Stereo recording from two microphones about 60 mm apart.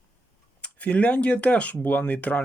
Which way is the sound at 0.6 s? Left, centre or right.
Left.